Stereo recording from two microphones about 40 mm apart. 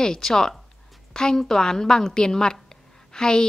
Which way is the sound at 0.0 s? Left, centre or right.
Centre.